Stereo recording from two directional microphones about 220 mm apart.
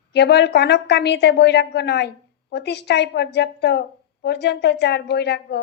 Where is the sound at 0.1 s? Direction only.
50° left (ahead or behind).